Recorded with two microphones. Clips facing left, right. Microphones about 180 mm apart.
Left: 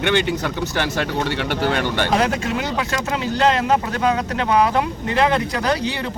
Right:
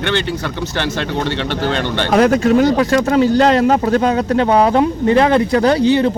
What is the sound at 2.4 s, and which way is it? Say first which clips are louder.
Speech: right 11 dB; 40° right (ahead or behind).